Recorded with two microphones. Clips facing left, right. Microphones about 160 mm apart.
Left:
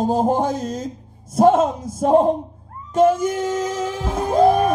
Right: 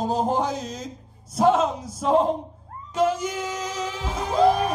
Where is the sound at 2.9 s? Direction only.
50° left (ahead or behind).